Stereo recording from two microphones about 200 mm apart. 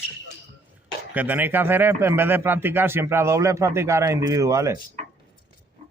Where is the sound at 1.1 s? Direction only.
10° right (ahead or behind).